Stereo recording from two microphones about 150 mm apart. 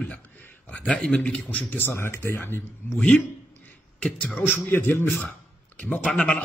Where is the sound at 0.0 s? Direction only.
10° left (ahead or behind).